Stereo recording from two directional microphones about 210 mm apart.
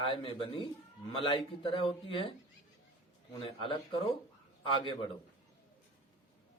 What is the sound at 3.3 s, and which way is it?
Speech, 25° left (ahead or behind).